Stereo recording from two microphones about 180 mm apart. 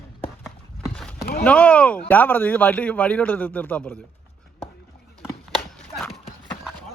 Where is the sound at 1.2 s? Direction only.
60° left (ahead or behind).